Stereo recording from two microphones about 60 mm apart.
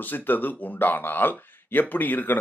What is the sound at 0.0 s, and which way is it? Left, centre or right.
Speech, left.